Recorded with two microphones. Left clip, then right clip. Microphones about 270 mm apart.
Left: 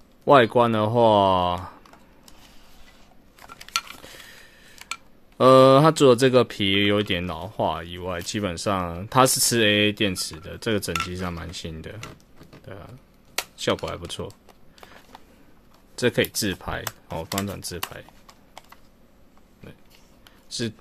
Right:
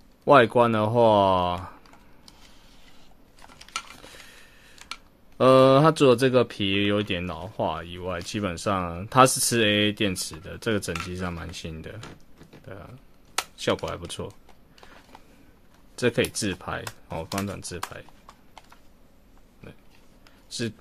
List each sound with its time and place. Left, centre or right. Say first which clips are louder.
0.2 s speech: left 1 dB; centre
3.5 s stir: left 7 dB; centre
5.4 s speech: left 3 dB; centre
16.0 s speech: left 2 dB; centre
20.4 s speech: left 2 dB; centre